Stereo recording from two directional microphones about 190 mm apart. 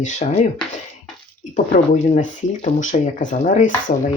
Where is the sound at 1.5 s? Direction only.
40° left (ahead or behind).